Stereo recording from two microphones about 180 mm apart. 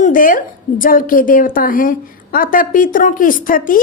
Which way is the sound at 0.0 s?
50° left (ahead or behind).